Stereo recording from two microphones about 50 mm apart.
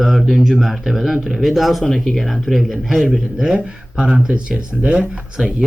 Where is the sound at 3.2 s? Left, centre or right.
Centre.